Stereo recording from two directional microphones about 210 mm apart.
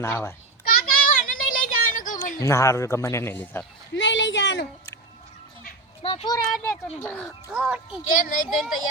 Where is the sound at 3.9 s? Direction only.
60° left (ahead or behind).